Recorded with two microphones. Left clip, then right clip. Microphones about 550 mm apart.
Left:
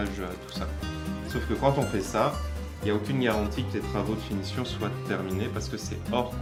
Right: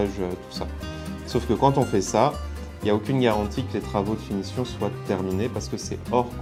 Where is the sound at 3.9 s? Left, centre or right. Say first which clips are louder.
Right 6 dB; right.